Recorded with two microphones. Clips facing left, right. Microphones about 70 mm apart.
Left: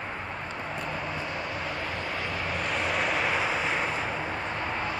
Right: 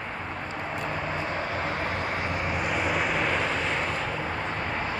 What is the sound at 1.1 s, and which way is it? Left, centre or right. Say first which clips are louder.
Vehicle: right 3 dB; right.